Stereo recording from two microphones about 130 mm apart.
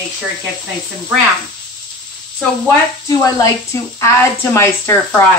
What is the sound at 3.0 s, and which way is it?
Speech, 25° left (ahead or behind).